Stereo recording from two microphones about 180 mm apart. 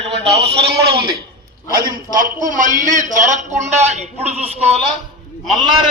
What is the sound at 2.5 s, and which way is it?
A man's voice, 45° right (ahead or behind).